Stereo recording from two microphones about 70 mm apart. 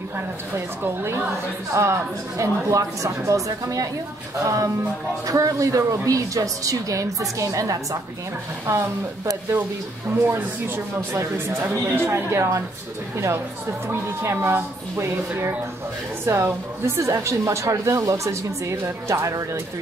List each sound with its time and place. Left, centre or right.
0.8 s speech: right
11.0 s speech: right
13.8 s speech: right